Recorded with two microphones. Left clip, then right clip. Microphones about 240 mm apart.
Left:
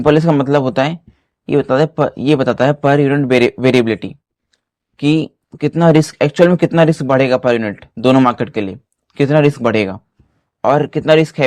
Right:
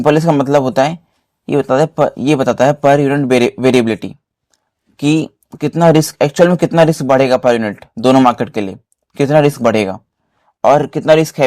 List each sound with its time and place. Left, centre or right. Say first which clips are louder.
0.0 s speech: right 1 dB; right